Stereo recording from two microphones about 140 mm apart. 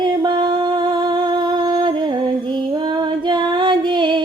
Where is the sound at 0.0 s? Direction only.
35° right (ahead or behind).